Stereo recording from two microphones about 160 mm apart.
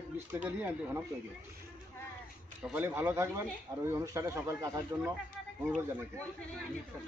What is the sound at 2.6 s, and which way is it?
A man's voice, 10° right (ahead or behind).